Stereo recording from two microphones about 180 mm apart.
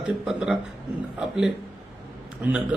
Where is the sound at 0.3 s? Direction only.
5° right (ahead or behind).